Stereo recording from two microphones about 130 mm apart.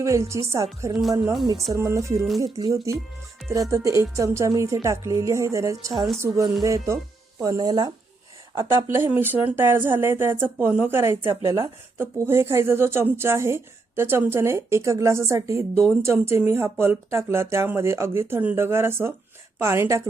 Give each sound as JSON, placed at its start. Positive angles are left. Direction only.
{"t": 0.0, "sound": "speech", "side_deg": -20}
{"t": 1.2, "sound": "speech", "side_deg": 0}
{"t": 1.7, "sound": "speech", "side_deg": -25}
{"t": 8.5, "sound": "speech", "side_deg": -20}